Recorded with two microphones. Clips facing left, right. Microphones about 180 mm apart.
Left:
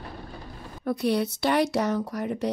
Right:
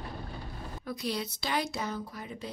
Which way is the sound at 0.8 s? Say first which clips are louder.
Left 10 dB; 60° left (ahead or behind).